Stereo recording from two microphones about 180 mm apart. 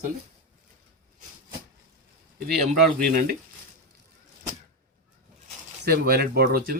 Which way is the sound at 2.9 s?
55° right (ahead or behind).